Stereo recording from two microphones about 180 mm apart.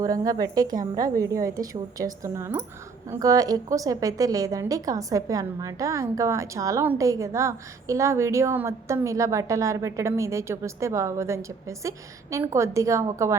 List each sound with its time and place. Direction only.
0.0 s a woman's voice: 20° right (ahead or behind)